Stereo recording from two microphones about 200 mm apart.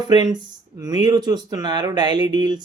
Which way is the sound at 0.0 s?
20° right (ahead or behind).